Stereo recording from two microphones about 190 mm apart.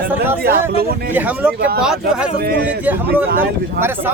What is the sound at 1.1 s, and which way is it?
Speech, 10° right (ahead or behind).